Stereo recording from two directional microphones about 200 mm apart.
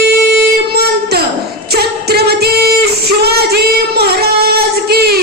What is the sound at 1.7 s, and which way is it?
Singing, 50° right (ahead or behind).